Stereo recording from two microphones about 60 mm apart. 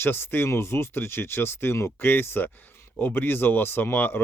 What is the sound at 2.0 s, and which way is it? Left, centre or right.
Speech, left.